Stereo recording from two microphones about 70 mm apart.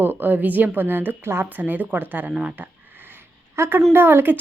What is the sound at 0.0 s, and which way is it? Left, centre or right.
A woman's voice, right.